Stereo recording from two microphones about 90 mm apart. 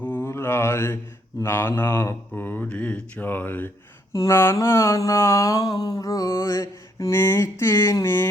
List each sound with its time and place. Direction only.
0.0 s mantra: 20° left (ahead or behind)
4.1 s mantra: 35° left (ahead or behind)